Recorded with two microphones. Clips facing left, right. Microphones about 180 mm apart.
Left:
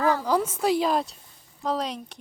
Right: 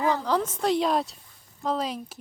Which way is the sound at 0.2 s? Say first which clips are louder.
Left 1 dB; 10° left (ahead or behind).